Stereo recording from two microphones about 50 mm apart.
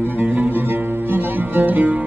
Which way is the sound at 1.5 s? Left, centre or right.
Right.